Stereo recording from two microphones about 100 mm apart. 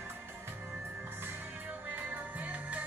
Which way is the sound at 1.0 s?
15° right (ahead or behind).